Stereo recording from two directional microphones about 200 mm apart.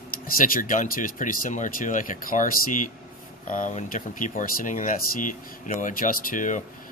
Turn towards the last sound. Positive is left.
turn(degrees=40)  # may be behind; listen again after turning